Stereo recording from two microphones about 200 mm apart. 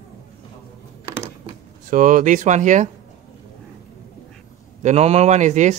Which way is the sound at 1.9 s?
40° right (ahead or behind).